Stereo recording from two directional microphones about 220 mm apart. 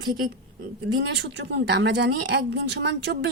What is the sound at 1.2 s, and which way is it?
A woman's voice, 50° right (ahead or behind).